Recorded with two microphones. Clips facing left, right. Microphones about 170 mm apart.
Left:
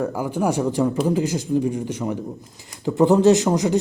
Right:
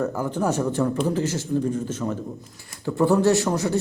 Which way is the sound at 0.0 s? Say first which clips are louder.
Left 2 dB; 10° left (ahead or behind).